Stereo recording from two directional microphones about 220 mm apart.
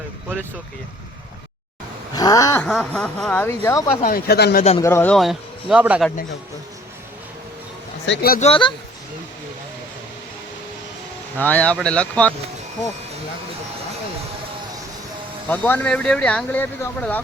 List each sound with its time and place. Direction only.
2.1 s speech: 15° left (ahead or behind)
2.6 s speech: centre (ahead or behind)
4.0 s speech: 45° left (ahead or behind)
4.8 s speech: 10° left (ahead or behind); by 6.1 s 5° right (ahead or behind)
8.0 s speech: 50° left (ahead or behind)
8.4 s speech: 25° left (ahead or behind)
11.3 s speech: 5° left (ahead or behind)
15.4 s speech: 10° left (ahead or behind)